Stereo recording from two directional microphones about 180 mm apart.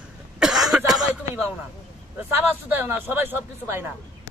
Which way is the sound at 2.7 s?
10° right (ahead or behind).